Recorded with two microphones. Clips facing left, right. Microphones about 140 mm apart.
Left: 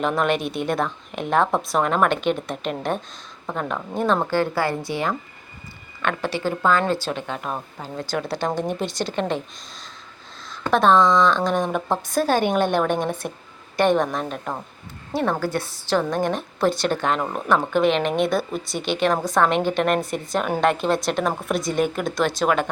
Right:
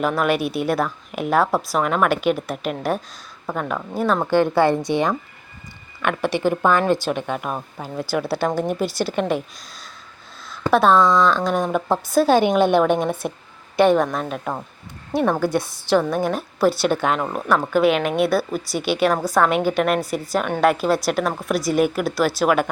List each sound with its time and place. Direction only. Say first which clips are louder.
0.0 s a woman's voice: right 2 dB; 5° right (ahead or behind)
4.3 s a woman's voice: right 5 dB; 20° right (ahead or behind)
10.5 s a woman's voice: right 1 dB; 10° right (ahead or behind)